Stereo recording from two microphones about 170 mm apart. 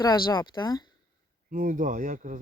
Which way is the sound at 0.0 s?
25° left (ahead or behind).